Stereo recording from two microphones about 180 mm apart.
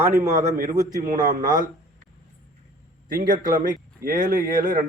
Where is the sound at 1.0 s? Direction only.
45° right (ahead or behind).